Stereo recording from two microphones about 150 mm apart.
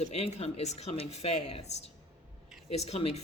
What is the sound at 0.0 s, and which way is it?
Speech, 45° left (ahead or behind).